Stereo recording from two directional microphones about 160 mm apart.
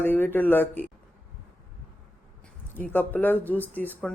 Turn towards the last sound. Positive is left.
turn(degrees=10)  # may be behind; listen again after turning